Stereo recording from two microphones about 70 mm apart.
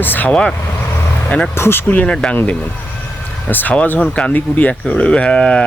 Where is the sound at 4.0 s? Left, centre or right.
Centre.